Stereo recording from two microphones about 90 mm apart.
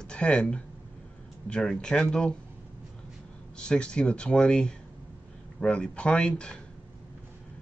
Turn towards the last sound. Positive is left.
turn(degrees=10)  # may be behind; listen again after turning